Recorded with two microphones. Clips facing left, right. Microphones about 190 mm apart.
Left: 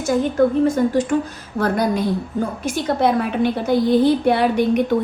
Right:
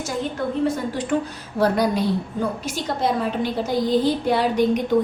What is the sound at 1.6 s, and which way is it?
A woman's voice, 50° left (ahead or behind).